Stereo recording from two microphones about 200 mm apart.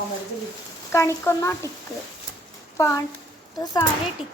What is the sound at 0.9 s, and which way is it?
Speech, 15° left (ahead or behind).